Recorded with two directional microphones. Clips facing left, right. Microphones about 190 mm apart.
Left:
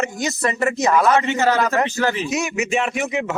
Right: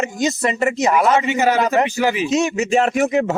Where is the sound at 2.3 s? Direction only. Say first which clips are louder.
Right 4 dB; 30° right (ahead or behind).